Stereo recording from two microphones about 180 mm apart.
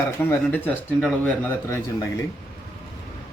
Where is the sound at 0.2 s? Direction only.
10° left (ahead or behind).